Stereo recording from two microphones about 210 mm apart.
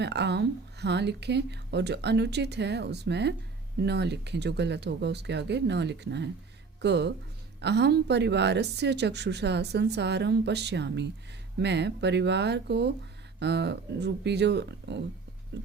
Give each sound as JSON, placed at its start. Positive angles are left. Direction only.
{"t": 0.0, "sound": "a woman's voice", "side_deg": -55}
{"t": 15.6, "sound": "music", "side_deg": -55}